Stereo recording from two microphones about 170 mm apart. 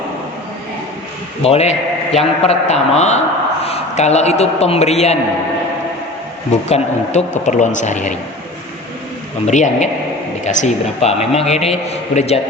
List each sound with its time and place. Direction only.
1.4 s a man's voice: 35° left (ahead or behind)
6.5 s a man's voice: 40° left (ahead or behind)
9.5 s a man's voice: 45° left (ahead or behind)